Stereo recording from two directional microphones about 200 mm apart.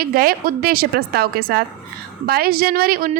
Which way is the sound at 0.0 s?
45° right (ahead or behind).